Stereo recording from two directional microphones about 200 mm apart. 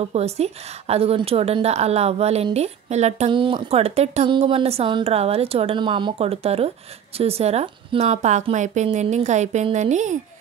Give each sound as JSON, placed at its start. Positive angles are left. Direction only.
{"t": 0.0, "sound": "a woman's voice", "side_deg": -30}